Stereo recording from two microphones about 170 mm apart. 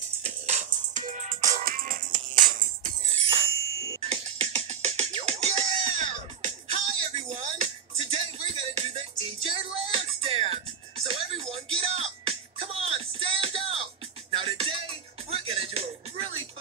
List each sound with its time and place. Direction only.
0.2 s music: 40° right (ahead or behind)
3.1 s music: 35° right (ahead or behind)
3.6 s a sound: 20° left (ahead or behind)
4.0 s music: 35° right (ahead or behind)